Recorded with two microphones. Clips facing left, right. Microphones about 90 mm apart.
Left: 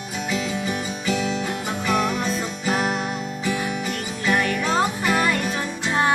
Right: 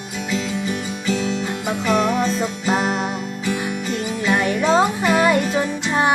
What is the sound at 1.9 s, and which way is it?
Music, 40° right (ahead or behind).